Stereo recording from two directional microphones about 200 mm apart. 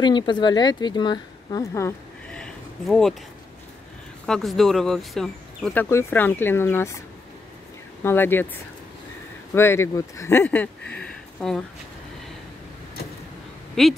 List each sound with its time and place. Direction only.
0.0 s speech: 20° left (ahead or behind); by 3.2 s 5° left (ahead or behind)
4.3 s speech: centre (ahead or behind)
8.0 s speech: 10° left (ahead or behind)
9.5 s speech: 10° left (ahead or behind)
11.0 s a sound: 5° left (ahead or behind)
13.8 s speech: centre (ahead or behind)